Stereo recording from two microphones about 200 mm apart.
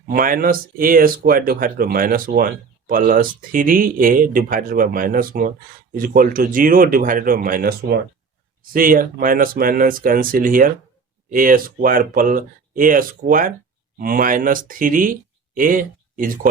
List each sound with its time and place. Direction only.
0.1 s speech: 45° right (ahead or behind)